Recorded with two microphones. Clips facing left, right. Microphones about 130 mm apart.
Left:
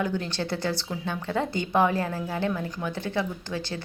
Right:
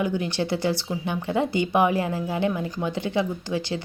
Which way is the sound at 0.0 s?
10° right (ahead or behind).